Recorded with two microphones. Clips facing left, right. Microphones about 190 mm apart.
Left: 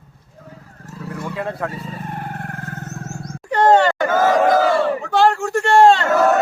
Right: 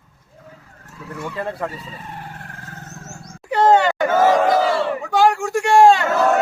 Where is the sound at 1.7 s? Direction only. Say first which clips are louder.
Left 5 dB; 50° left (ahead or behind).